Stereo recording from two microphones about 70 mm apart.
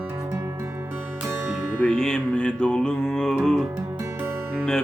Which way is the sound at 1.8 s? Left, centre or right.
Centre.